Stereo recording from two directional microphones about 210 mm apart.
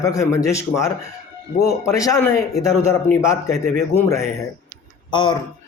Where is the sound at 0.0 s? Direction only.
15° left (ahead or behind).